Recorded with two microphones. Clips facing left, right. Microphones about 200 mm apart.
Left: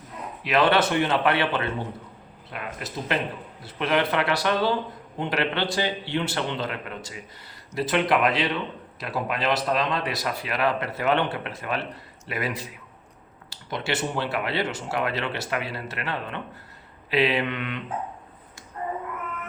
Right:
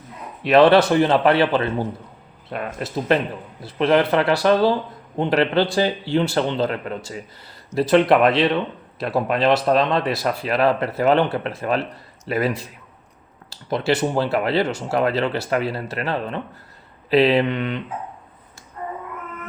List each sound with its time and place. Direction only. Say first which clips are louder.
0.4 s speech: right 8 dB; 35° right (ahead or behind)
13.7 s speech: right 8 dB; 35° right (ahead or behind)